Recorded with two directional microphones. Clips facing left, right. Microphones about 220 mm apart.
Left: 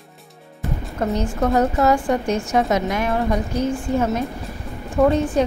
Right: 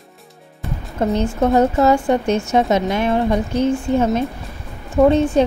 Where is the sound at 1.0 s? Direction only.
25° right (ahead or behind).